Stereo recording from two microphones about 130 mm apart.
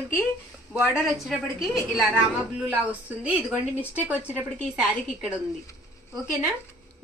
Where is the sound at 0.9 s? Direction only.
5° right (ahead or behind).